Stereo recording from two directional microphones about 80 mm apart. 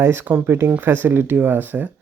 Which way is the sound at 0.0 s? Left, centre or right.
Right.